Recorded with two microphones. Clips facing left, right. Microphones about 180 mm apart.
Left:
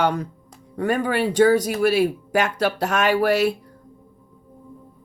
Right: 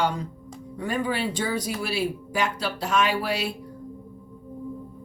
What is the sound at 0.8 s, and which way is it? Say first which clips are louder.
Speech: left 6 dB; 55° left (ahead or behind).